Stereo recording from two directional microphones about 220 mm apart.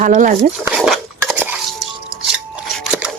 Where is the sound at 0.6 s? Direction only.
Centre (ahead or behind).